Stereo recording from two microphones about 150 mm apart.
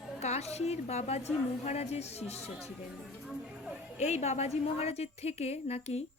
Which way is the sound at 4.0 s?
50° left (ahead or behind).